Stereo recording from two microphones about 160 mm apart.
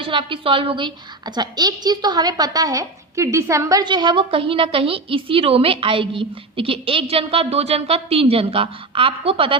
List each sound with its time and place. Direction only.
0.0 s a woman's voice: 30° right (ahead or behind)